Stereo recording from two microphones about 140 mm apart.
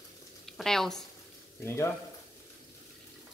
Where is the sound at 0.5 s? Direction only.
Centre (ahead or behind).